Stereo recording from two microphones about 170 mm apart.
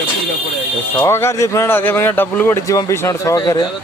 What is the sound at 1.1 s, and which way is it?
Speech, 15° left (ahead or behind).